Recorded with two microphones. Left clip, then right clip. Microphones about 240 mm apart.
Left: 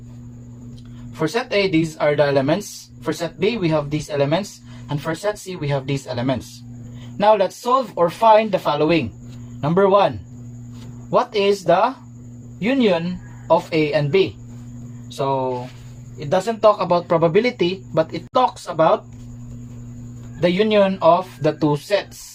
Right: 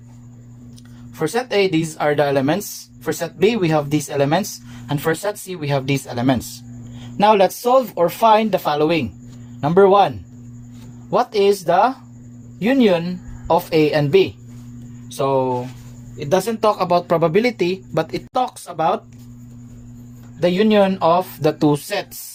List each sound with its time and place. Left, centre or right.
1.2 s speech: right
11.1 s speech: right
16.2 s speech: right
20.4 s speech: right